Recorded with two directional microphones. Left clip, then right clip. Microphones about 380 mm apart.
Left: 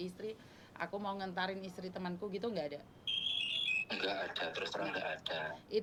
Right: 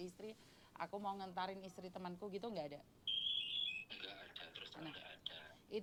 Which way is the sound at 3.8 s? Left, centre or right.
Left.